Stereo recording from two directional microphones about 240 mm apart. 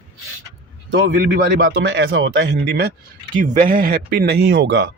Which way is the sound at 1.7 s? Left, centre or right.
Right.